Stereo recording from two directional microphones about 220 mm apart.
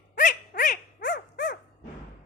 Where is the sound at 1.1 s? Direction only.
45° left (ahead or behind).